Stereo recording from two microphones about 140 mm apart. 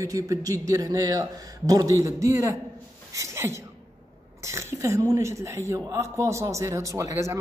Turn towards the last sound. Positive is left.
turn(degrees=-20)  # may be behind; listen again after turning